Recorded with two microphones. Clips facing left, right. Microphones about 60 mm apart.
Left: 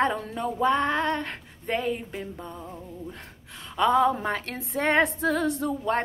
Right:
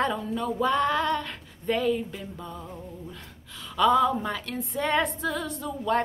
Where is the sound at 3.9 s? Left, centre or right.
Left.